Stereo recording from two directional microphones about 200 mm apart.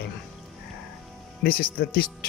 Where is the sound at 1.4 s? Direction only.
50° left (ahead or behind).